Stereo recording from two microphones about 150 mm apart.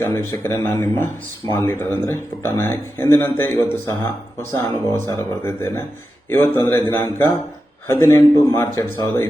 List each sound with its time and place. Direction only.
0.0 s speech: 15° left (ahead or behind)